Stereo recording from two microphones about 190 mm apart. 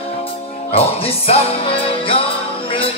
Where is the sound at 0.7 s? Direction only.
30° left (ahead or behind).